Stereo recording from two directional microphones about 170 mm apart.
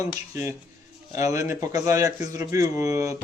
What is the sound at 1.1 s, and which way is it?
A man's voice, 20° right (ahead or behind).